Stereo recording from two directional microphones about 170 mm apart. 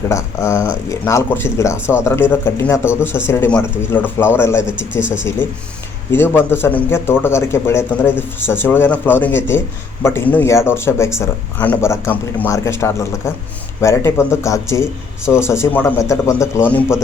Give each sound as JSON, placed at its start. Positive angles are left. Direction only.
{"t": 0.1, "sound": "a man's voice", "side_deg": 15}